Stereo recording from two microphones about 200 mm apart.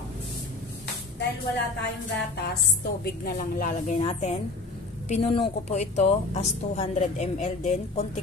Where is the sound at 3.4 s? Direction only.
40° left (ahead or behind).